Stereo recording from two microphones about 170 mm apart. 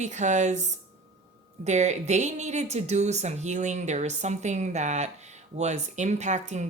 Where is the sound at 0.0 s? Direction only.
45° right (ahead or behind).